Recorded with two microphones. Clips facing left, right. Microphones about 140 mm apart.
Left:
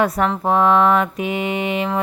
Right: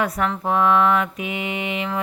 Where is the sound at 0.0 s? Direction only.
35° left (ahead or behind).